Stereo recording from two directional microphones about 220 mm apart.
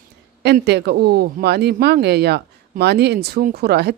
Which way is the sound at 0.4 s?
50° right (ahead or behind).